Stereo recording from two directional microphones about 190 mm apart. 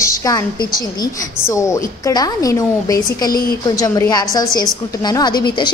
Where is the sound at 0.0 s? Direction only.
15° left (ahead or behind).